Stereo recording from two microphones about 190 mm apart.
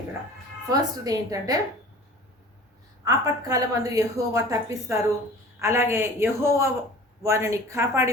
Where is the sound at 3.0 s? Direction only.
20° right (ahead or behind).